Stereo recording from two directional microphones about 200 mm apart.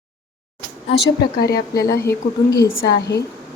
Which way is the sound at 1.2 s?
50° left (ahead or behind).